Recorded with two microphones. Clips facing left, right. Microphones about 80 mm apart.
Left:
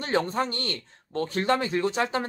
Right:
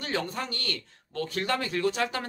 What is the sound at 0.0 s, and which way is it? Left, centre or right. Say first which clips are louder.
Speech: left 6 dB; left.